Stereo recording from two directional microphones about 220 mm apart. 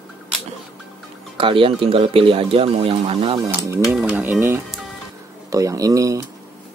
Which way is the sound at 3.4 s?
15° right (ahead or behind).